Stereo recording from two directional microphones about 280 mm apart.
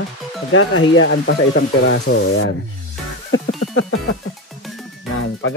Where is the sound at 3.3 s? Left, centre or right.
Left.